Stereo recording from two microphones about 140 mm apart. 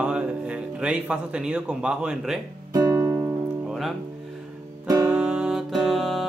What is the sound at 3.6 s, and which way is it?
Music, centre (ahead or behind).